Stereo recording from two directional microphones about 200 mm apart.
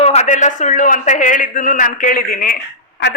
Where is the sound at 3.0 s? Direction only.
60° left (ahead or behind).